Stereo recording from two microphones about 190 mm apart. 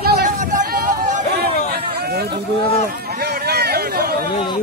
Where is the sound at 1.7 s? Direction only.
55° right (ahead or behind).